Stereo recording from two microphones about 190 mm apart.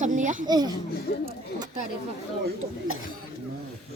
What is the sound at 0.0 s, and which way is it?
Speech, 40° right (ahead or behind).